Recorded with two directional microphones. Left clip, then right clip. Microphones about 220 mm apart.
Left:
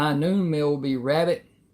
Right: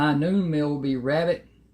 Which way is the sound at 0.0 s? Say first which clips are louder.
Even; 35° left (ahead or behind).